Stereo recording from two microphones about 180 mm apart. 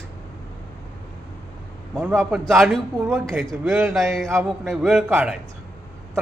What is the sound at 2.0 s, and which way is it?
A man's voice, 5° right (ahead or behind).